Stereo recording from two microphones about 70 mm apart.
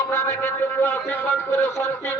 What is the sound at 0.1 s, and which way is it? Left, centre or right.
Music, left.